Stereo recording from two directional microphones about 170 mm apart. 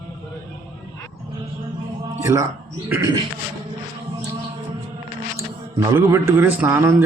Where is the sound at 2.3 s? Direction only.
20° right (ahead or behind).